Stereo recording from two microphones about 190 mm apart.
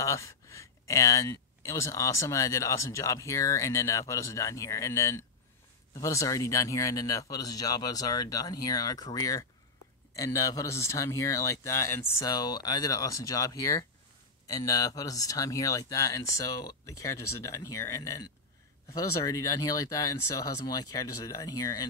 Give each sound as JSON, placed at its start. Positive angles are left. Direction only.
{"t": 0.0, "sound": "speech", "side_deg": 15}